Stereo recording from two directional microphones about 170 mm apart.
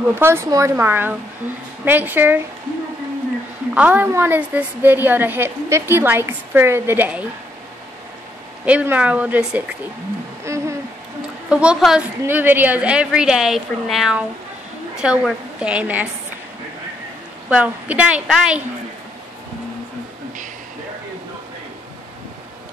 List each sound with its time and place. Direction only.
0.1 s a woman's voice: 15° right (ahead or behind)
3.7 s a woman's voice: 10° right (ahead or behind)
8.6 s a woman's voice: 10° right (ahead or behind)
10.4 s a sound: 15° right (ahead or behind)
11.4 s a woman's voice: 5° right (ahead or behind)
17.5 s a woman's voice: 5° right (ahead or behind)